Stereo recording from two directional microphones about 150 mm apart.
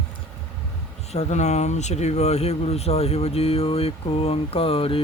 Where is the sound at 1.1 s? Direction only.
50° left (ahead or behind).